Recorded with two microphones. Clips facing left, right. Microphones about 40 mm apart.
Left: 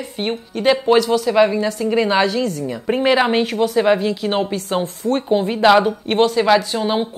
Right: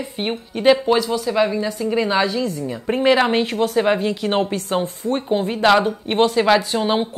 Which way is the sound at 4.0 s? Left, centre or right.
Right.